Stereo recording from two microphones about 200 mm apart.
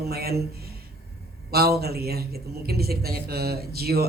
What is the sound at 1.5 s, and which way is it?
A woman's voice, 50° right (ahead or behind).